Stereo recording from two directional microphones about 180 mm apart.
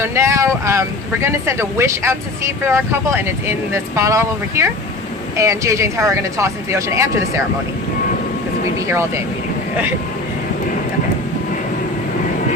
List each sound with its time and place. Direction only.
0.0 s speech: 15° right (ahead or behind)
8.9 s speech: 15° right (ahead or behind)